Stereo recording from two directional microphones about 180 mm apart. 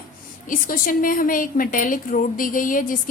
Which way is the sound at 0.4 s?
50° left (ahead or behind).